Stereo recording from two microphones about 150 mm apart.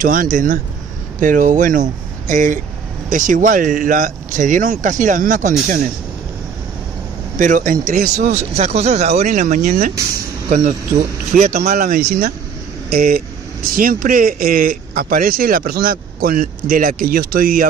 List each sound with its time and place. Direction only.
0.0 s speech: 60° right (ahead or behind)
7.3 s speech: 60° right (ahead or behind); by 8.3 s 80° right
8.5 s speech: 45° right (ahead or behind)
10.5 s speech: 80° right
12.9 s speech: 70° right (ahead or behind)